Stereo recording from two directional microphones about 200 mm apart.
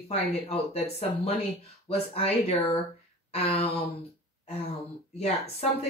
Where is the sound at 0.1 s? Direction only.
30° left (ahead or behind).